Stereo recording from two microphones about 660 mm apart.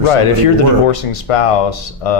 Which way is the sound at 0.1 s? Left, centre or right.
Left.